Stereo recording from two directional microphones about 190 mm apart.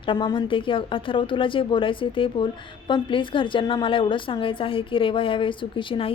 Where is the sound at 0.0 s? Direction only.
25° left (ahead or behind).